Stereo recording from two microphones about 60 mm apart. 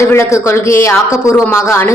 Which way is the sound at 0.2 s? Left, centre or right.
Left.